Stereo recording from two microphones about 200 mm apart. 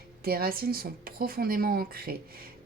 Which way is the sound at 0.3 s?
50° right (ahead or behind).